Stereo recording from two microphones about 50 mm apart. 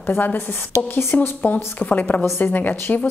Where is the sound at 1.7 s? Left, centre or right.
Left.